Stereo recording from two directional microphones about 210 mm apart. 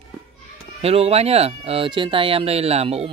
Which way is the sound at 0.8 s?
30° right (ahead or behind).